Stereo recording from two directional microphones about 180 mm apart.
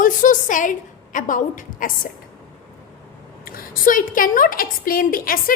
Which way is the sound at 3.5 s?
50° left (ahead or behind).